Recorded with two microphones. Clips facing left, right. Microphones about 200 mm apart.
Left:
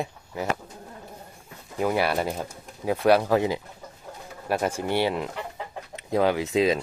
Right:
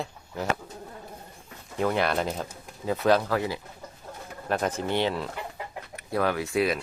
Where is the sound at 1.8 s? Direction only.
5° left (ahead or behind).